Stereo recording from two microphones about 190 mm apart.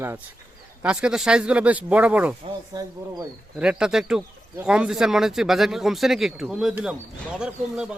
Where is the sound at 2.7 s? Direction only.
20° right (ahead or behind).